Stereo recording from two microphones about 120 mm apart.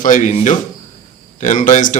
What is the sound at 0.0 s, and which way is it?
Speech, 90° left.